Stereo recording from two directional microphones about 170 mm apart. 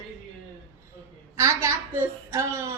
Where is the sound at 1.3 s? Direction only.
15° right (ahead or behind).